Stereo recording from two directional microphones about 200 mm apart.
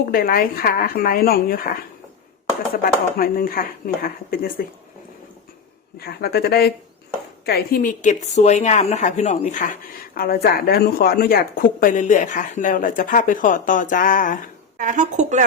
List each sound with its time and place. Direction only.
0.0 s a woman's voice: 45° left (ahead or behind)
2.8 s a woman's voice: 45° left (ahead or behind)
6.0 s a woman's voice: 50° left (ahead or behind); by 9.6 s 35° left (ahead or behind)
10.2 s a woman's voice: 50° left (ahead or behind)
14.8 s a woman's voice: 40° right (ahead or behind)